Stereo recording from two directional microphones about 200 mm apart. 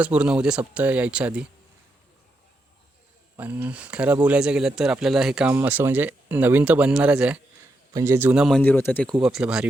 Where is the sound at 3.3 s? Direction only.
10° right (ahead or behind); by 9.0 s 10° left (ahead or behind).